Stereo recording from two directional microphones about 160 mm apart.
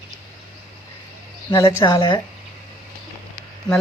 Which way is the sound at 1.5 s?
25° left (ahead or behind).